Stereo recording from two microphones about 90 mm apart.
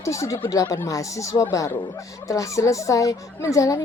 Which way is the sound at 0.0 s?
35° left (ahead or behind).